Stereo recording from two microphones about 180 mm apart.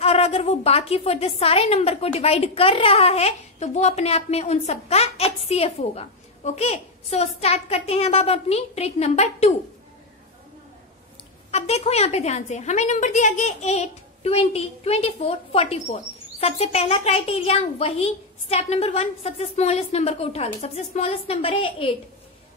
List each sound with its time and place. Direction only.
0.0 s a woman's voice: 35° left (ahead or behind)
11.5 s a woman's voice: 35° left (ahead or behind)